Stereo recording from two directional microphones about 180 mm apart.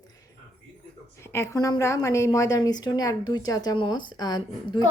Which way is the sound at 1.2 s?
15° left (ahead or behind).